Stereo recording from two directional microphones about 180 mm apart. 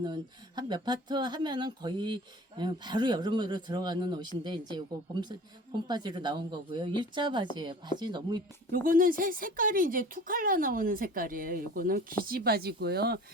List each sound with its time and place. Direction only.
0.0 s speech: 25° right (ahead or behind)
5.9 s speech: 25° right (ahead or behind)
8.7 s speech: 50° right (ahead or behind)